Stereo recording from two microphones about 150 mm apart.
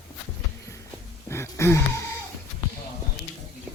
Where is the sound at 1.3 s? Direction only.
15° left (ahead or behind).